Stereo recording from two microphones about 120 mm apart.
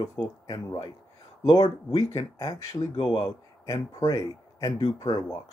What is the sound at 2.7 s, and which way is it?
Speech, 35° left (ahead or behind).